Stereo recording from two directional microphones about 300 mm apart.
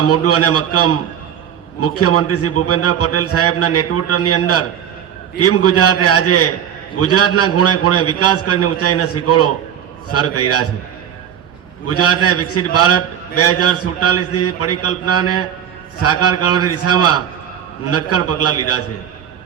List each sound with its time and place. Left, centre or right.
0.1 s a man's voice: left
11.9 s a man's voice: left